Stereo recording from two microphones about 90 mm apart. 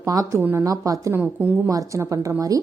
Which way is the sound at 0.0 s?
40° right (ahead or behind).